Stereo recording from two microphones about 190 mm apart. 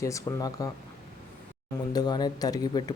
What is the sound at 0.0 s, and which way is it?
Speech, 15° left (ahead or behind).